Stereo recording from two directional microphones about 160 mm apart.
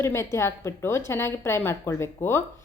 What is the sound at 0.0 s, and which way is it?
A woman's voice, 15° left (ahead or behind).